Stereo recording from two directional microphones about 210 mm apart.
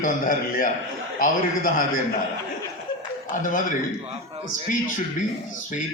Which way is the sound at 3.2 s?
40° left (ahead or behind).